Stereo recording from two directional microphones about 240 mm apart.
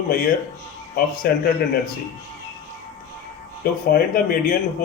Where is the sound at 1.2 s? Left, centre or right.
Left.